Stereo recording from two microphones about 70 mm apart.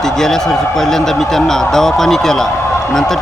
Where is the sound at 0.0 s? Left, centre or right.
Centre.